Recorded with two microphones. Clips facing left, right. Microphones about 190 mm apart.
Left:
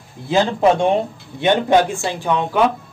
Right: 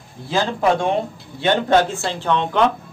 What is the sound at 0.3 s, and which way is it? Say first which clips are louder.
A man's voice: left 3 dB; 20° left (ahead or behind).